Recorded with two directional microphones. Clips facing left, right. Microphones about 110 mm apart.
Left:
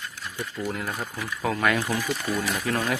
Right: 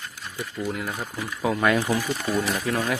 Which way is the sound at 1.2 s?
15° right (ahead or behind).